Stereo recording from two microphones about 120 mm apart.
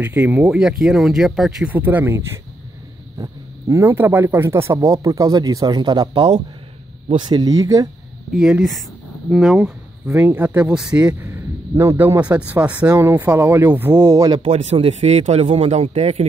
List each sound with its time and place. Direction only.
0.0 s speech: 15° right (ahead or behind)
1.7 s speech: 15° right (ahead or behind)
8.3 s speech: 5° right (ahead or behind)
9.6 s speech: 20° right (ahead or behind)
11.2 s a sound: 20° right (ahead or behind)
12.2 s speech: 10° right (ahead or behind); by 14.4 s 30° right (ahead or behind)
14.4 s speech: 60° right (ahead or behind)